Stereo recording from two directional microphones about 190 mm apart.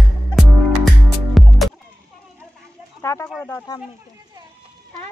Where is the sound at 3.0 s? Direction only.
15° left (ahead or behind).